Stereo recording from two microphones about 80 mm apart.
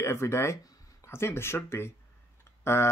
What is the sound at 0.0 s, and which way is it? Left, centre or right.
Speech, left.